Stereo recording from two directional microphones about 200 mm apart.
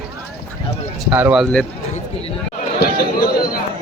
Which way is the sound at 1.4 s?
5° left (ahead or behind).